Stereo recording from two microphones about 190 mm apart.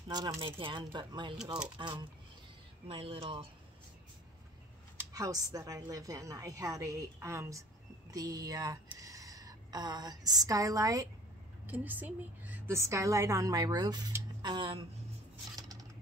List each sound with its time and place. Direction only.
0.1 s speech: 20° right (ahead or behind)
4.9 s a sound: 20° right (ahead or behind)
5.5 s a woman's voice: 20° right (ahead or behind)